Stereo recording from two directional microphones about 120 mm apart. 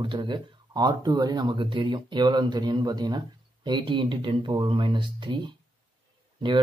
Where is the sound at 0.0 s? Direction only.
40° right (ahead or behind).